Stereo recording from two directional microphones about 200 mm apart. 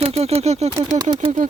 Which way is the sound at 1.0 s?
20° right (ahead or behind).